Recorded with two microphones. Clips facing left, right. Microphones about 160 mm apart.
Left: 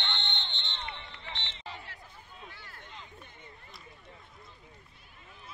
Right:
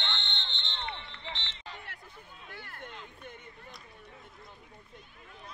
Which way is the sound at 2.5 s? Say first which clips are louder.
Right 6 dB; 55° right (ahead or behind).